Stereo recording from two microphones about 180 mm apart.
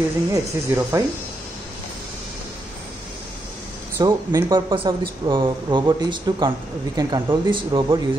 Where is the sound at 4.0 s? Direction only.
20° right (ahead or behind).